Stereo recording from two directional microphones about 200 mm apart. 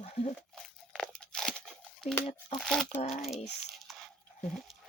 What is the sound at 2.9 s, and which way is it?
Speech, 30° left (ahead or behind).